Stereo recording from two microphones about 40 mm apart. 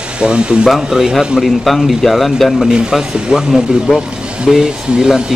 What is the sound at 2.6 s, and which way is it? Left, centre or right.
Speech, centre.